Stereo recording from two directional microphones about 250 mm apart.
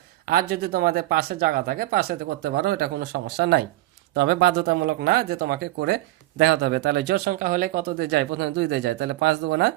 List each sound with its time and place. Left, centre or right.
0.3 s speech: right
7.1 s speech: right